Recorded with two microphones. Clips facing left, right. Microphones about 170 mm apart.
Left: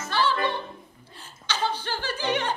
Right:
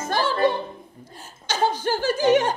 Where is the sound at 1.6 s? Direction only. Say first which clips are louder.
Right 7 dB; 45° right (ahead or behind).